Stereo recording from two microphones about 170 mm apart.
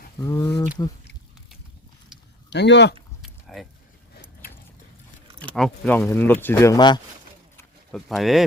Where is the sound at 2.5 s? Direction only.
90° left.